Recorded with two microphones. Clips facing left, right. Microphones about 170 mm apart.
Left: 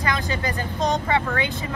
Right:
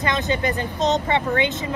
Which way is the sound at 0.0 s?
25° right (ahead or behind).